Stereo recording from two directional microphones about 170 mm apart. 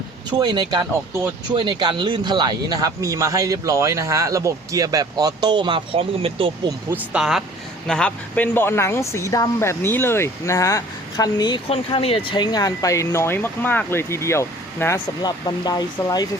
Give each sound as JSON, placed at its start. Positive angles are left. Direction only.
{"t": 0.3, "sound": "speech", "side_deg": -25}
{"t": 6.9, "sound": "speech", "side_deg": -5}
{"t": 15.2, "sound": "speech", "side_deg": 25}